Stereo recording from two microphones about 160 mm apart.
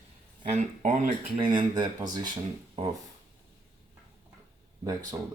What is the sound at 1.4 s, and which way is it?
Speech, 30° right (ahead or behind).